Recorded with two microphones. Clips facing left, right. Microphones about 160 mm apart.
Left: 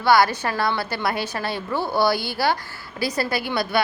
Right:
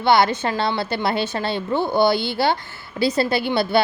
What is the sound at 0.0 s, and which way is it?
A woman's voice, 25° right (ahead or behind).